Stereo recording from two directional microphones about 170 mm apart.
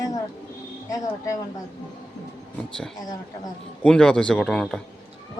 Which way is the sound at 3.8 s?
5° left (ahead or behind).